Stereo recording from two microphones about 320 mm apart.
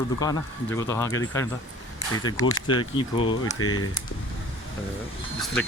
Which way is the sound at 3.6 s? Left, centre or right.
Left.